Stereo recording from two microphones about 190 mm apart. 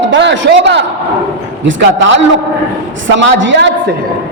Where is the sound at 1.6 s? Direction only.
80° right.